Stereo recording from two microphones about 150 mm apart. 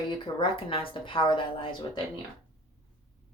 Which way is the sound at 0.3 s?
35° left (ahead or behind).